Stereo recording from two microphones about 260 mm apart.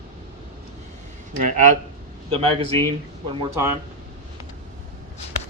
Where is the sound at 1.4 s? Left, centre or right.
Right.